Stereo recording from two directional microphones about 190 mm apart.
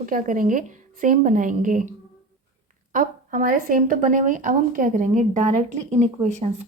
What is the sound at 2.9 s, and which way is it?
Speech, 45° right (ahead or behind).